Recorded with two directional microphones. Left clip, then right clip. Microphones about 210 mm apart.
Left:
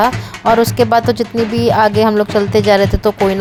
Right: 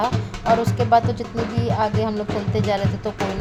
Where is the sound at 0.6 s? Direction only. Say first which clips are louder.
Left 6 dB; 50° left (ahead or behind).